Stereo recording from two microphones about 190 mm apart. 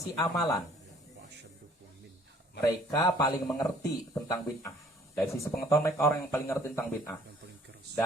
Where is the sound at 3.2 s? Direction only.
20° left (ahead or behind).